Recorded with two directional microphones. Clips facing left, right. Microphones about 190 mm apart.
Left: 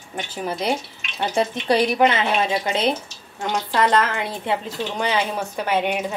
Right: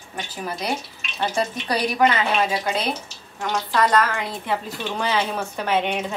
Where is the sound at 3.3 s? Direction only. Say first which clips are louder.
Left 1 dB; 25° left (ahead or behind).